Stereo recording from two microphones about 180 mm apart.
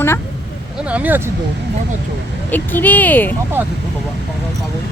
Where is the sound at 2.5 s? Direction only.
10° left (ahead or behind).